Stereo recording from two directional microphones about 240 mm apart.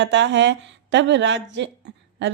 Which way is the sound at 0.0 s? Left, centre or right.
Right.